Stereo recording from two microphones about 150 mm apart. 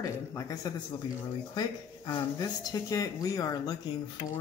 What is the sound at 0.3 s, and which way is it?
Speech, 20° left (ahead or behind).